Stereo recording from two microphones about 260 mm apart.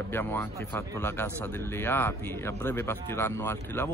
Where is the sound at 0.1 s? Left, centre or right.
Centre.